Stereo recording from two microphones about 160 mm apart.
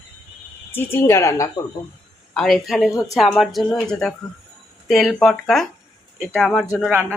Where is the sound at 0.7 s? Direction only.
15° left (ahead or behind).